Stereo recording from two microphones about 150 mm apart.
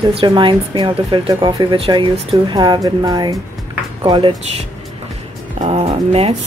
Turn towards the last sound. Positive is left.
turn(degrees=-40)  # may be behind; listen again after turning